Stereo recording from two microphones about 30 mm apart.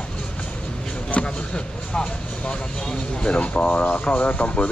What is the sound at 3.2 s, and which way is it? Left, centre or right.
Speech, left.